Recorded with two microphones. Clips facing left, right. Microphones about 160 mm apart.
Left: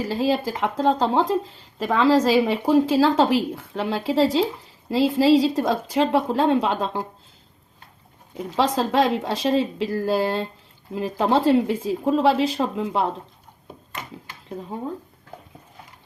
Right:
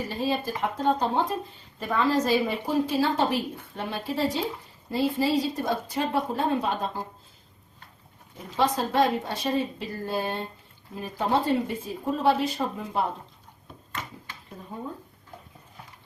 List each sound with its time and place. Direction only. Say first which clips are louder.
0.0 s speech: left 6 dB; 90° left
8.5 s speech: left 3 dB; 90° left